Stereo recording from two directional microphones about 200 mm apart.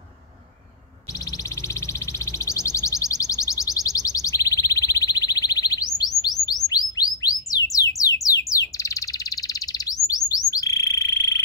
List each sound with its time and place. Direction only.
1.5 s a sound: 15° left (ahead or behind)
6.4 s chirp tone: 20° left (ahead or behind)
10.0 s bird: 15° left (ahead or behind)